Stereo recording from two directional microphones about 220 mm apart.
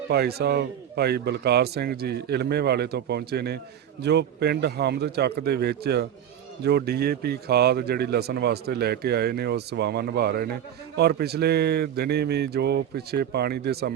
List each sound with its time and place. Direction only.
0.1 s a man's voice: 45° right (ahead or behind)